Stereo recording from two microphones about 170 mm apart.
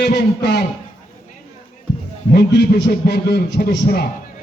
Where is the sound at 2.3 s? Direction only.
75° left (ahead or behind).